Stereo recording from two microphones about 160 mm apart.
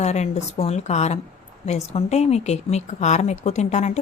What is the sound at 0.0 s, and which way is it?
A woman's voice, 45° left (ahead or behind).